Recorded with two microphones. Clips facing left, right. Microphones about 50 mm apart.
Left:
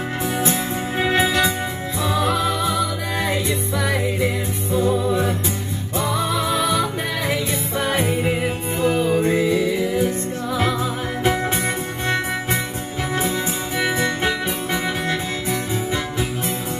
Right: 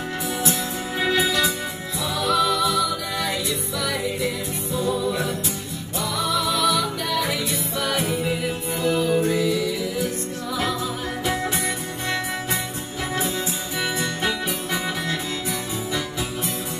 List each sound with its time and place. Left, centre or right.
0.4 s music: left
13.7 s music: left